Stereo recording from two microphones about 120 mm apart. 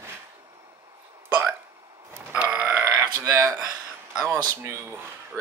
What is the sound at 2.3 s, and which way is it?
Grunt, 15° right (ahead or behind).